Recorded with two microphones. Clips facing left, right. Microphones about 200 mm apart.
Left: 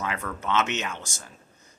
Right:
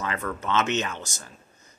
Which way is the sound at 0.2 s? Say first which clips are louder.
Right 2 dB; 5° left (ahead or behind).